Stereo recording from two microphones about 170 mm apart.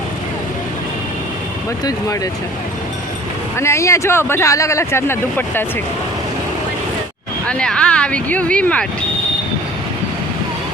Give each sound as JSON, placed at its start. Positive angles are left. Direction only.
{"t": 1.8, "sound": "speech", "side_deg": 20}
{"t": 3.6, "sound": "speech", "side_deg": 15}
{"t": 7.4, "sound": "speech", "side_deg": 5}